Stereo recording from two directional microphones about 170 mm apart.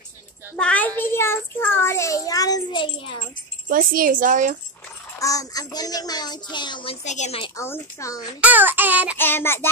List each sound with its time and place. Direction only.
0.6 s a child's voice: 10° left (ahead or behind); by 2.9 s 25° left (ahead or behind)
3.6 s a woman's voice: 55° right (ahead or behind)
5.2 s speech: 20° left (ahead or behind)
7.1 s a woman's voice: 40° left (ahead or behind)
7.5 s a child's voice: 15° left (ahead or behind)
8.4 s child singing: 10° right (ahead or behind)
9.2 s a child's voice: 15° left (ahead or behind)